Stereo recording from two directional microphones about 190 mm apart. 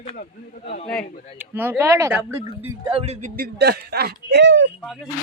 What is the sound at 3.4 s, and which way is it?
Speech, 60° right (ahead or behind).